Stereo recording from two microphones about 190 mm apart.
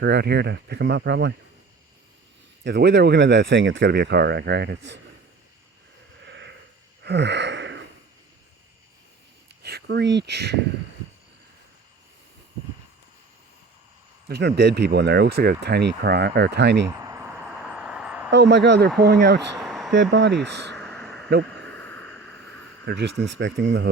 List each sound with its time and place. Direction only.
0.0 s speech: 60° right (ahead or behind)
2.6 s speech: 60° right (ahead or behind)
6.2 s a sound: 65° right (ahead or behind)
7.0 s gasp: 65° right (ahead or behind)
9.6 s speech: 60° right (ahead or behind)
14.3 s speech: 60° right (ahead or behind)
16.9 s a sound: 15° right (ahead or behind)
18.3 s speech: 65° right (ahead or behind)
19.6 s a sound: centre (ahead or behind)
19.9 s speech: 70° right (ahead or behind)
20.7 s a sound: 5° left (ahead or behind)
22.9 s speech: 60° right (ahead or behind)